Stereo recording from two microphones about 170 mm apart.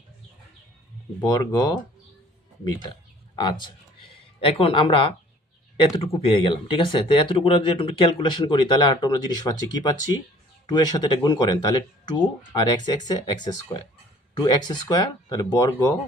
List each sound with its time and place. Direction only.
1.2 s speech: 25° left (ahead or behind)
3.3 s speech: 25° left (ahead or behind)